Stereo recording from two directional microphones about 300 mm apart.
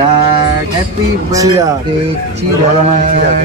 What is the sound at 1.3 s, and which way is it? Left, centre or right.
Speech, centre.